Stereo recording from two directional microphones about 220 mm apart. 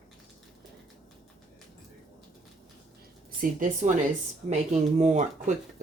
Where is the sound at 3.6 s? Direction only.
35° right (ahead or behind).